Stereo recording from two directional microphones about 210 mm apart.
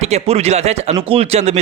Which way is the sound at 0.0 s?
30° right (ahead or behind).